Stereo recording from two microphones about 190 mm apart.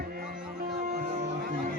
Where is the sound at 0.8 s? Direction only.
50° right (ahead or behind).